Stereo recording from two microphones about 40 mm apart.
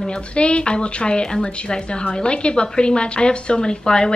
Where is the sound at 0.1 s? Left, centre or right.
Left.